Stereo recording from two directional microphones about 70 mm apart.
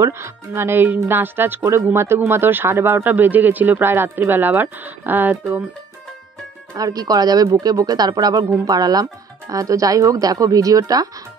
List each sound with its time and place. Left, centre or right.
0.0 s speech: right
6.7 s speech: right
9.5 s speech: right